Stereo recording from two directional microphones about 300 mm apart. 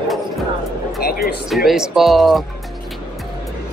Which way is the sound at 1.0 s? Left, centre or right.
Left.